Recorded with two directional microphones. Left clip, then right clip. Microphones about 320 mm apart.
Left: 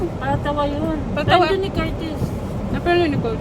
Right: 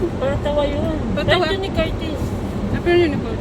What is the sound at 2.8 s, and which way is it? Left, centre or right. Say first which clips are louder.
Speech: right 1 dB; centre.